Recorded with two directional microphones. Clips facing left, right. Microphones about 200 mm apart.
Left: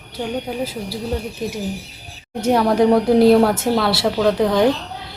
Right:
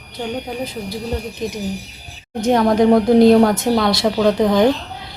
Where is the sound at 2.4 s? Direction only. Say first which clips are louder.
Right 1 dB; 5° left (ahead or behind).